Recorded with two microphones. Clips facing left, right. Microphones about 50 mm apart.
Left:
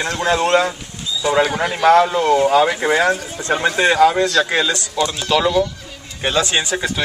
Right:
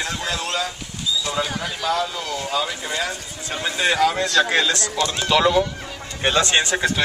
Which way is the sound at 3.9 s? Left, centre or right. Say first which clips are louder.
Left 6 dB; centre.